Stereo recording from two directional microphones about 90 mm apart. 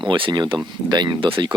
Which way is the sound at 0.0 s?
60° right (ahead or behind).